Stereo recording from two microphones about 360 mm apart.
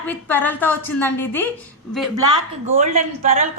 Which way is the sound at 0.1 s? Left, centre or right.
Centre.